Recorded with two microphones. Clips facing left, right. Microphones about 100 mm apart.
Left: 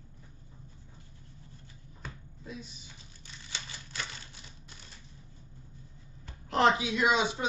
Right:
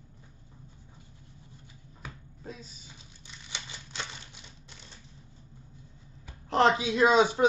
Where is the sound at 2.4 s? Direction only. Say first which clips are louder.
Even; 40° right (ahead or behind).